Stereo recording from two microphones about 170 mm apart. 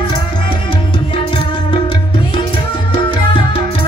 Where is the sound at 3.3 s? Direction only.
30° left (ahead or behind).